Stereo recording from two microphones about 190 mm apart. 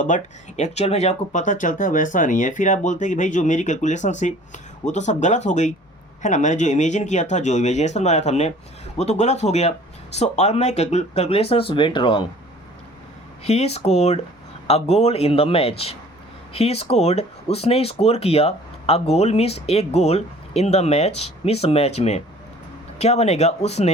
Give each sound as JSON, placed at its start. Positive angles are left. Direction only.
{"t": 0.0, "sound": "speech", "side_deg": 40}
{"t": 13.4, "sound": "speech", "side_deg": 35}